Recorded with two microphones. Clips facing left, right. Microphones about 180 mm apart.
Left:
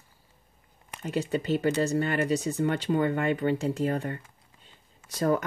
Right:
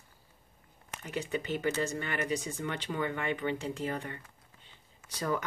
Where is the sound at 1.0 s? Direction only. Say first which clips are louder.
Left 6 dB; 35° left (ahead or behind).